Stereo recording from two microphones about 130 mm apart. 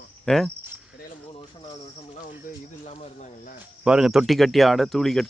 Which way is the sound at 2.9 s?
65° left (ahead or behind).